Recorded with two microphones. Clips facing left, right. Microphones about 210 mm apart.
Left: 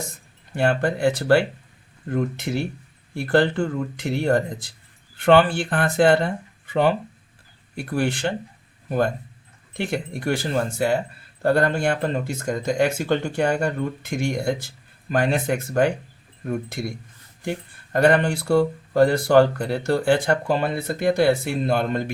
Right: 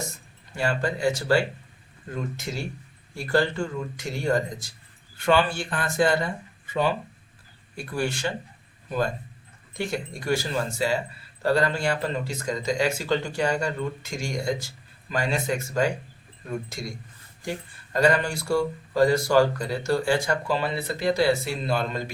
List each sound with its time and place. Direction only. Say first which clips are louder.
0.5 s speech: left 5 dB; 60° left (ahead or behind)
17.9 s speech: left 4 dB; 60° left (ahead or behind)